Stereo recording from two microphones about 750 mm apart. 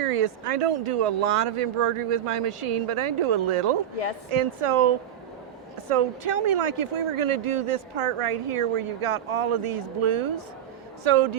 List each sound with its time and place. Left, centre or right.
0.0 s speech: right